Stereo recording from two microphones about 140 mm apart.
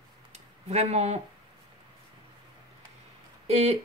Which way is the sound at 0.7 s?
50° right (ahead or behind).